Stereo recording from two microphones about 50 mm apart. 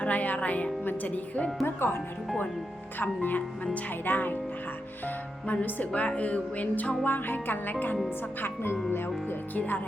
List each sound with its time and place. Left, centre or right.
0.0 s speech: left
1.6 s speech: left
3.0 s speech: left
9.6 s speech: left